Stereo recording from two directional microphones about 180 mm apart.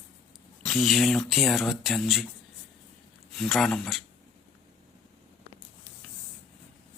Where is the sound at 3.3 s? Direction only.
Centre (ahead or behind).